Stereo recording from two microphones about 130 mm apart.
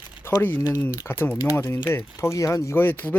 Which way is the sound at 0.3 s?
15° left (ahead or behind).